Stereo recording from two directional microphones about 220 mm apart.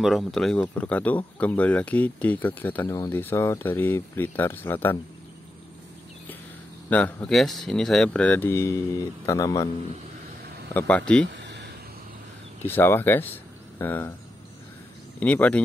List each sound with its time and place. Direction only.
0.0 s speech: centre (ahead or behind)
6.9 s speech: 5° left (ahead or behind)
10.7 s speech: 10° left (ahead or behind)
11.2 s a sound: 50° right (ahead or behind)
12.6 s speech: 10° left (ahead or behind)
15.1 s speech: 5° left (ahead or behind)